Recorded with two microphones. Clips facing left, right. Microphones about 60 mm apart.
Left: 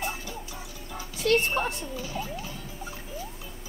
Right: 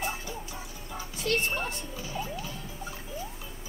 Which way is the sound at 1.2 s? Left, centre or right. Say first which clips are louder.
Left 6 dB; left.